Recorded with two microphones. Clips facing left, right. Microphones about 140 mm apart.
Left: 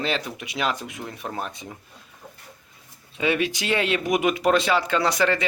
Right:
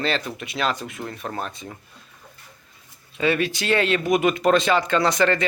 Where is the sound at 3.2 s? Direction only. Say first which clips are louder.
Right 1 dB; 15° left (ahead or behind).